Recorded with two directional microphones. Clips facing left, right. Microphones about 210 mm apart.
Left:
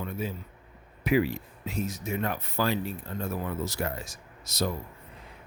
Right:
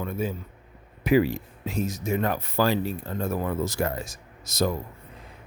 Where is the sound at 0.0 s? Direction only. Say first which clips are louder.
Right 4 dB; 50° right (ahead or behind).